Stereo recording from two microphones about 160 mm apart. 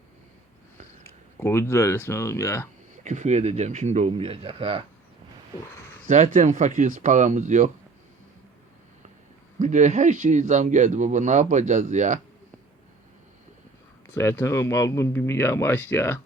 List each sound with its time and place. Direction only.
1.0 s speech: 15° left (ahead or behind)
3.0 s speech: 50° right (ahead or behind)
6.1 s speech: 50° right (ahead or behind)
9.6 s speech: 50° right (ahead or behind)
14.1 s speech: 15° left (ahead or behind)